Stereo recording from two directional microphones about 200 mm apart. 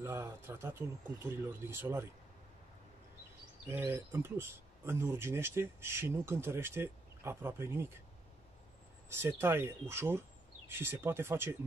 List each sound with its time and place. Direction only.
0.0 s speech: 15° right (ahead or behind)
3.6 s speech: 10° right (ahead or behind)
9.1 s speech: 10° right (ahead or behind)